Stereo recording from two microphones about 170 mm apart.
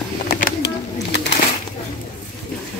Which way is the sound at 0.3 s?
60° left (ahead or behind).